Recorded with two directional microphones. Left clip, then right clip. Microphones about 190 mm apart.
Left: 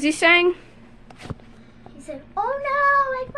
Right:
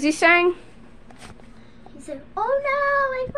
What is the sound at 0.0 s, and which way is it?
Speech, 10° right (ahead or behind).